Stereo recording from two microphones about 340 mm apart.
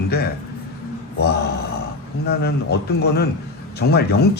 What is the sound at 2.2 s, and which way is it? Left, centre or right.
Speech, left.